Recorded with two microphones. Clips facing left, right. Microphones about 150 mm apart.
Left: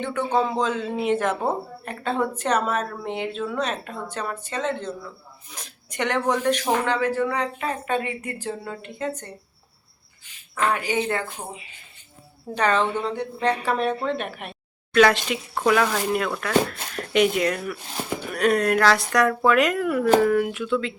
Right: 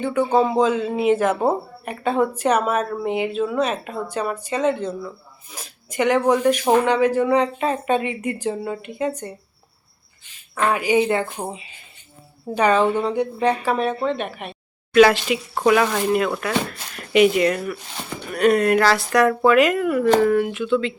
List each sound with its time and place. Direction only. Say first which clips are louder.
0.0 s a woman's voice: right 5 dB; 10° right (ahead or behind)
10.5 s a woman's voice: right 5 dB; 10° right (ahead or behind)
12.5 s a woman's voice: right 5 dB; 10° right (ahead or behind)